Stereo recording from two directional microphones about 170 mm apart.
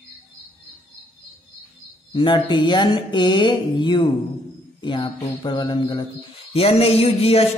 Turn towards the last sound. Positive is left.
turn(degrees=35)  # may be behind; listen again after turning